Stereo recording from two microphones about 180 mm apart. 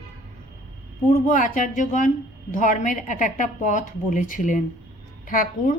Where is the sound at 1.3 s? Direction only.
45° left (ahead or behind).